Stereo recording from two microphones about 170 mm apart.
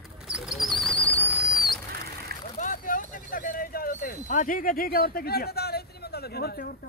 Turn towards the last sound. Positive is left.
turn(degrees=60)  # may be behind; listen again after turning